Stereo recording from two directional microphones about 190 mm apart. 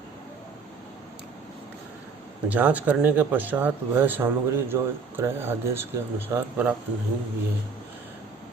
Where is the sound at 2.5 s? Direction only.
10° right (ahead or behind).